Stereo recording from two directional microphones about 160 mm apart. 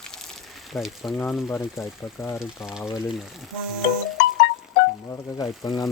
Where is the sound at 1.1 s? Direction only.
10° left (ahead or behind).